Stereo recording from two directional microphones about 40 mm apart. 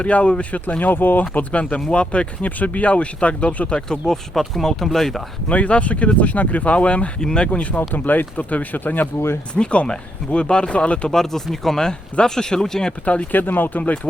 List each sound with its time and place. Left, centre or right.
0.0 s speech: left
0.8 s speech: left
1.9 s speech: left
3.8 s speech: left
4.0 s speech: centre
5.5 s speech: left
7.2 s speech: left
7.8 s speech: left
9.6 s speech: left
11.1 s speech: centre
13.3 s speech: left